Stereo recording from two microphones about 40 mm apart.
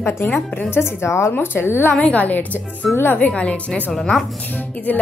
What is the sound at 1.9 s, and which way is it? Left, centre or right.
Speech, left.